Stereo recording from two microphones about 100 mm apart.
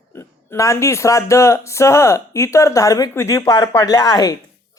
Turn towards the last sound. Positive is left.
turn(degrees=35)  # may be behind; listen again after turning